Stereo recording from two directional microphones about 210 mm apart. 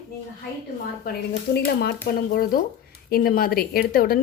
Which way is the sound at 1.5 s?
50° left (ahead or behind).